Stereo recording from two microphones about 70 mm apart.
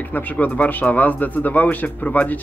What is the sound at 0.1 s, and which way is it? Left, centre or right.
A man's voice, left.